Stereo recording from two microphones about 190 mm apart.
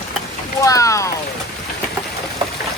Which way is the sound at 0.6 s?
15° left (ahead or behind).